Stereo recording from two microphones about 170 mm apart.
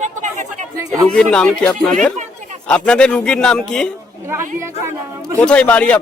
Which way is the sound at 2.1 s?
45° right (ahead or behind).